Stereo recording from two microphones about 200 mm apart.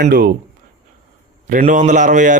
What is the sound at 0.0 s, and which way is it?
Speech, 45° right (ahead or behind).